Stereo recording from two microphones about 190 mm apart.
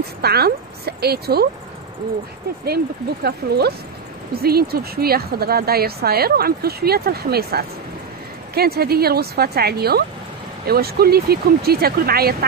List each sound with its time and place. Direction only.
0.2 s speech: 55° right (ahead or behind)
3.3 s speech: 55° right (ahead or behind)